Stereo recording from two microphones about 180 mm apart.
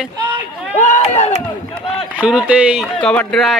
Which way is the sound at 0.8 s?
40° left (ahead or behind).